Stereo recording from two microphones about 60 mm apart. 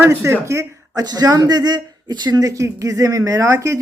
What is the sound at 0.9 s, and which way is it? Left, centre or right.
Speech, right.